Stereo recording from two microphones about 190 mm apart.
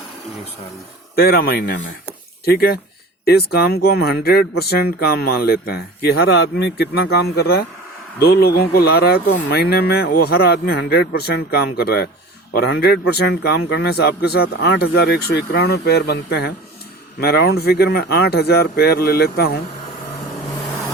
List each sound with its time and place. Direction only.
1.1 s speech: 55° left (ahead or behind)